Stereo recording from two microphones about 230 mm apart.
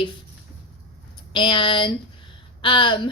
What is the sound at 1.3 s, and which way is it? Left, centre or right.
A woman's voice, left.